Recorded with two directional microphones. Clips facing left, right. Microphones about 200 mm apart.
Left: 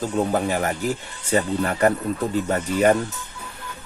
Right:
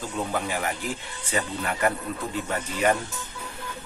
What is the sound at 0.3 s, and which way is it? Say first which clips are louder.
Speech: left 6 dB; 40° left (ahead or behind).